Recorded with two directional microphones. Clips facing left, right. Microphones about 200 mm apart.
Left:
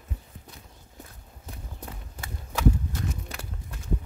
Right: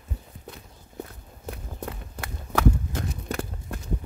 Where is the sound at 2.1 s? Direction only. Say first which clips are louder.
Right 6 dB; 55° right (ahead or behind).